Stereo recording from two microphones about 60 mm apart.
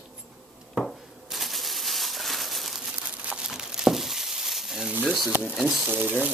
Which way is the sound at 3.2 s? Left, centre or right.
Right.